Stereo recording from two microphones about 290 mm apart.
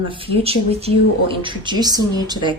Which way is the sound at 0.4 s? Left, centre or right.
Centre.